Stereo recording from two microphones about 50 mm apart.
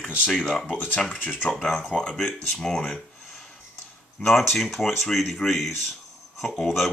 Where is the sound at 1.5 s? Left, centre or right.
Centre.